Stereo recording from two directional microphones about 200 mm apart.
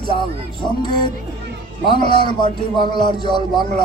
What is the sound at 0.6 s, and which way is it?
A man's voice, 20° left (ahead or behind).